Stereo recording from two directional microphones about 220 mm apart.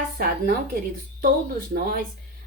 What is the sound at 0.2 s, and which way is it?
Speech, 45° right (ahead or behind).